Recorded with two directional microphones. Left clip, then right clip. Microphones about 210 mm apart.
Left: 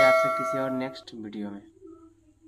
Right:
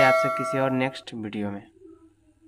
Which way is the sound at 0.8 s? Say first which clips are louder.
Right 6 dB; 35° right (ahead or behind).